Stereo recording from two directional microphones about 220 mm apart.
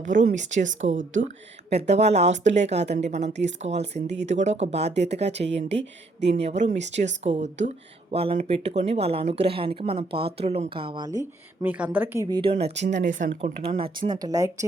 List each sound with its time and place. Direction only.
0.0 s a woman's voice: 35° right (ahead or behind)
6.3 s speech: 30° right (ahead or behind)
11.6 s speech: 10° right (ahead or behind); by 12.7 s 25° right (ahead or behind)
12.7 s speech: 55° right (ahead or behind)
13.1 s speech: 35° right (ahead or behind); by 14.5 s 15° right (ahead or behind)